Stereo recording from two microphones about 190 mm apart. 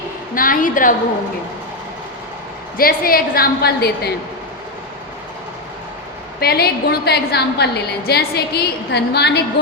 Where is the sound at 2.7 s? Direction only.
50° left (ahead or behind).